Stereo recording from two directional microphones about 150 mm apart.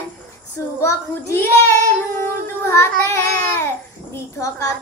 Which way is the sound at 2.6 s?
20° left (ahead or behind).